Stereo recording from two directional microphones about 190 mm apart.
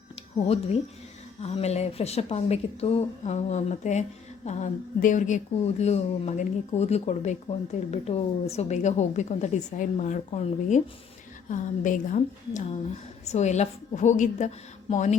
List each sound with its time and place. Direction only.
0.3 s speech: 35° left (ahead or behind)